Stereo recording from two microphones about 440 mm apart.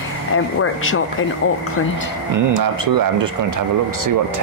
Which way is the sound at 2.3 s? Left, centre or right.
Right.